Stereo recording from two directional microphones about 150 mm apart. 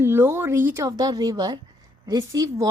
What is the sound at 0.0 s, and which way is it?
A woman's voice, 15° right (ahead or behind).